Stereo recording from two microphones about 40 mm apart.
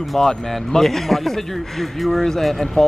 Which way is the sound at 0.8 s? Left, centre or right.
Centre.